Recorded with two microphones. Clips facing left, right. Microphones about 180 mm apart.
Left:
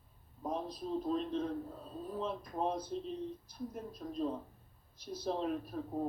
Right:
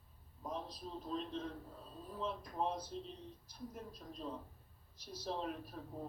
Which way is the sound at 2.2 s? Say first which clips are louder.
Left 2 dB; 55° left (ahead or behind).